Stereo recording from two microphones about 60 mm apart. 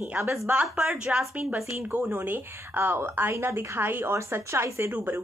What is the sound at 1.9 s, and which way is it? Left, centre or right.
Speech, right.